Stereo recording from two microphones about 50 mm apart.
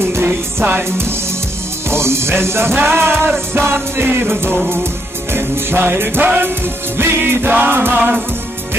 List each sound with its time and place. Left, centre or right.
0.2 s music: right
1.9 s music: right